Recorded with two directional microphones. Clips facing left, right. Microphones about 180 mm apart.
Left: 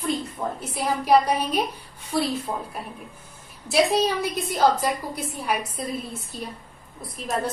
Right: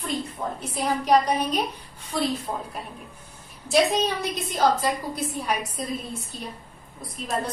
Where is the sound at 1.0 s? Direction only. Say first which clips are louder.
Left 2 dB; 10° left (ahead or behind).